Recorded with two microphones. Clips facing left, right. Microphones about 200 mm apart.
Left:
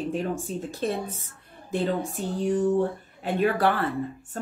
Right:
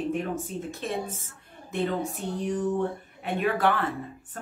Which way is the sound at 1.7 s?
30° left (ahead or behind).